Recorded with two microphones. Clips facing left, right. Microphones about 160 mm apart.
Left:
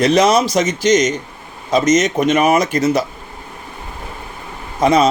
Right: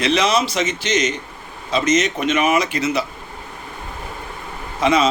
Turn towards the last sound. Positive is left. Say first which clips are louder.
# left 4 dB
turn(degrees=40)  # may be behind; listen again after turning